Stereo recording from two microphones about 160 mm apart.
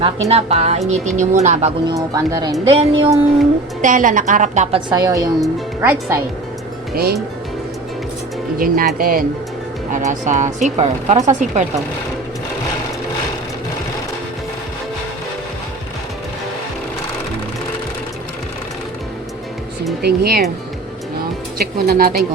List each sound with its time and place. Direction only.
0.0 s speech: 40° right (ahead or behind)
1.9 s speech: 20° right (ahead or behind)
2.6 s speech: 35° right (ahead or behind)
3.8 s speech: 55° right (ahead or behind)
4.9 s speech: 25° right (ahead or behind)
5.8 s speech: 15° right (ahead or behind)
6.9 s speech: 75° right (ahead or behind)
8.5 s speech: 65° right (ahead or behind)
9.9 s speech: 50° right (ahead or behind)
20.0 s speech: 85° right
21.6 s speech: 70° right (ahead or behind)